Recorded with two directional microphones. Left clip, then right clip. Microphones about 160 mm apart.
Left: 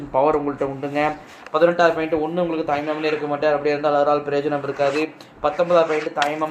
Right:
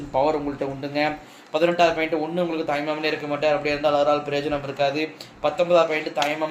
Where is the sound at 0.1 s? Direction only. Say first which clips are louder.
Left 3 dB; 25° left (ahead or behind).